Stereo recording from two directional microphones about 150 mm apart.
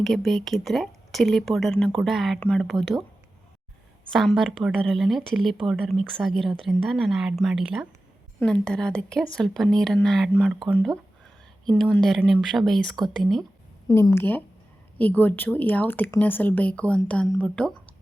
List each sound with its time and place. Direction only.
0.0 s speech: centre (ahead or behind)
4.1 s speech: centre (ahead or behind)
11.6 s speech: 5° left (ahead or behind)
13.8 s a woman's voice: 20° left (ahead or behind)